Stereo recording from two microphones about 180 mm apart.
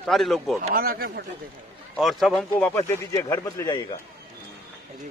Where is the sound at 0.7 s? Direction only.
55° right (ahead or behind).